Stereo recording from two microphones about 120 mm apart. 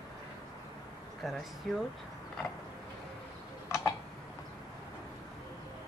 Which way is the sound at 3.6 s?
20° left (ahead or behind).